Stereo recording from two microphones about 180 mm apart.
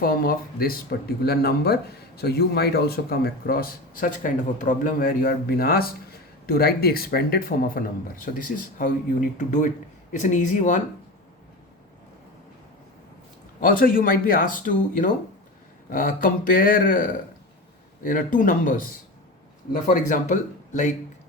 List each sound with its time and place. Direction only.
0.0 s speech: 55° left (ahead or behind)
13.6 s speech: 50° left (ahead or behind)